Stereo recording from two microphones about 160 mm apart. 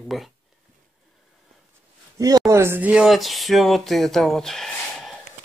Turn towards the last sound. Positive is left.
turn(degrees=0)  # may be behind; listen again after turning